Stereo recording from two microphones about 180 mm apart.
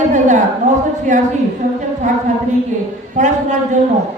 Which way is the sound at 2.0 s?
40° right (ahead or behind).